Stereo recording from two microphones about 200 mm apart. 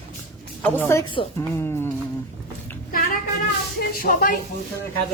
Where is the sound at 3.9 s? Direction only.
45° left (ahead or behind).